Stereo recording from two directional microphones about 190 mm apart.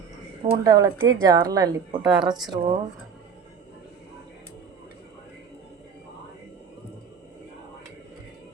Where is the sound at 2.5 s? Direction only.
30° right (ahead or behind).